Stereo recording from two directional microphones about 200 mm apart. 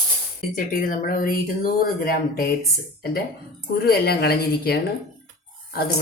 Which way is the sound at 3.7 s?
50° left (ahead or behind).